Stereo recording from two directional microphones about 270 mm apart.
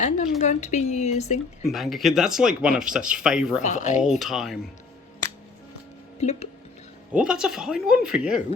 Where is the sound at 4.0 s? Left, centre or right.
Centre.